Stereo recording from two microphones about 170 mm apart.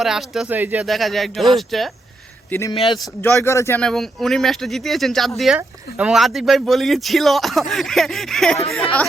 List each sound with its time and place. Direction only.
0.0 s speech: centre (ahead or behind)
0.9 s speech: centre (ahead or behind)
2.5 s speech: 15° left (ahead or behind)
2.7 s speech: 30° left (ahead or behind)
3.2 s speech: 15° left (ahead or behind)
3.8 s speech: centre (ahead or behind)